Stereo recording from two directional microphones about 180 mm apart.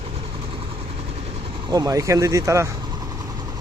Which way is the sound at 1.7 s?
20° right (ahead or behind).